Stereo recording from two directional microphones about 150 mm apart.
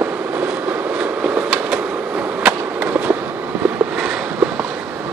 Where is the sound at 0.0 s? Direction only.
15° right (ahead or behind).